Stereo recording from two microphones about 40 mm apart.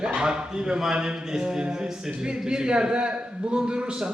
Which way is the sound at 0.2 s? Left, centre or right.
Centre.